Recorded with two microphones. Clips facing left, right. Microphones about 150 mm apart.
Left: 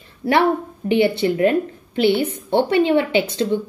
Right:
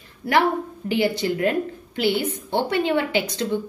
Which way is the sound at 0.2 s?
25° left (ahead or behind).